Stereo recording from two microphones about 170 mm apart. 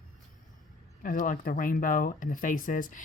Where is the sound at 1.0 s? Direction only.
50° left (ahead or behind).